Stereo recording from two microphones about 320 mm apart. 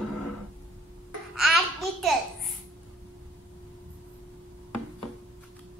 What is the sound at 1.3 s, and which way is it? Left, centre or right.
Speech, centre.